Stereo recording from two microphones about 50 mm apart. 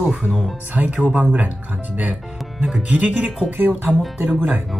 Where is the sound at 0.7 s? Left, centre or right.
Right.